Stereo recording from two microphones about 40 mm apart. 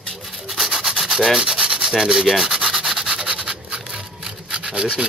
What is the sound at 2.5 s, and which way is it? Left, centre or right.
Rub, centre.